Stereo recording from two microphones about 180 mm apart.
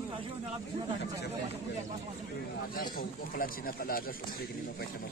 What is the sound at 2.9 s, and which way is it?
Speech, 50° left (ahead or behind).